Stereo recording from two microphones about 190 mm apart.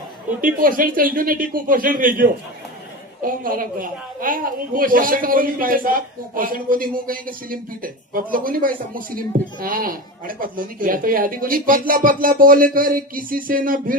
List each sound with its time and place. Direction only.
0.4 s speech: 45° right (ahead or behind)